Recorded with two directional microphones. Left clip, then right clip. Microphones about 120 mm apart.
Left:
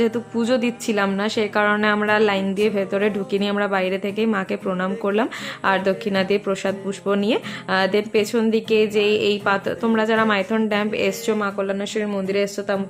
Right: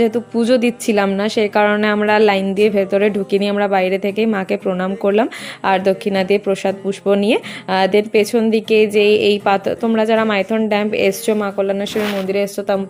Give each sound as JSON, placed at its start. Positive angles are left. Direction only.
{"t": 0.0, "sound": "a woman's voice", "side_deg": -30}